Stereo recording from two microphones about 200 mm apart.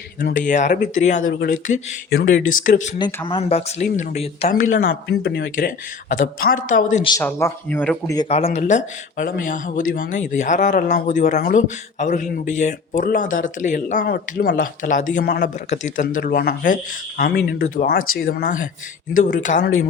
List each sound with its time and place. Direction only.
0.2 s speech: 45° left (ahead or behind)
1.3 s speech: 55° left (ahead or behind)
1.6 s speech: 40° left (ahead or behind)
2.0 s speech: 50° left (ahead or behind)
3.0 s speech: 10° left (ahead or behind)
3.2 s speech: 25° left (ahead or behind)
4.7 s speech: 50° left (ahead or behind)
7.2 s speech: 10° left (ahead or behind)
8.1 s speech: 25° left (ahead or behind)
8.4 s speech: 35° left (ahead or behind)
14.0 s speech: 50° left (ahead or behind)